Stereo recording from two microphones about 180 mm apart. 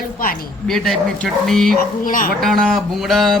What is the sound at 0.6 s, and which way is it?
Speech, centre (ahead or behind).